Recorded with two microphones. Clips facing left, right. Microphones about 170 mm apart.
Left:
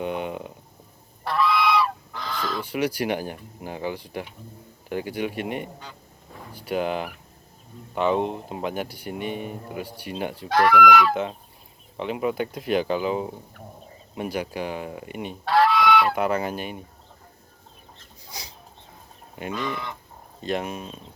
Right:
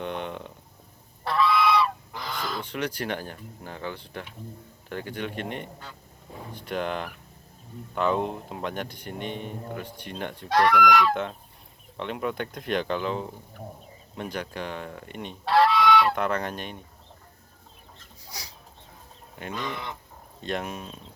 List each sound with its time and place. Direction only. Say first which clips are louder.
0.0 s a sound: left 4 dB; 10° left (ahead or behind)
1.2 s goose: even; centre (ahead or behind)
7.9 s speech: left 3 dB; centre (ahead or behind)
14.2 s goose: left 5 dB; 10° left (ahead or behind)
18.3 s a sound: left 2 dB; 20° left (ahead or behind)
20.4 s speech: left 3 dB; 5° left (ahead or behind)